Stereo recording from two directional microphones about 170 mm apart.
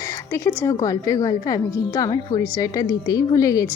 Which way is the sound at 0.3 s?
15° left (ahead or behind).